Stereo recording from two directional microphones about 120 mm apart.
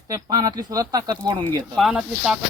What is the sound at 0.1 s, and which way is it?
Speech, 35° right (ahead or behind).